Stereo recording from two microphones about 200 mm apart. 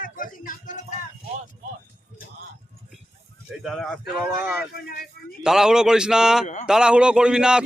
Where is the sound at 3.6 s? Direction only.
Centre (ahead or behind).